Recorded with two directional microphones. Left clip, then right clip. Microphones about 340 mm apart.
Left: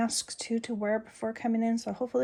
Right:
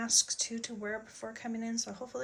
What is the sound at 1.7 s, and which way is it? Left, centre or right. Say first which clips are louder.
Speech: left 7 dB; centre.